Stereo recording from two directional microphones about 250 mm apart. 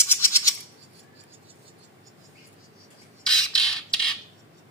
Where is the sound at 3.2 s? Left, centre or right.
Centre.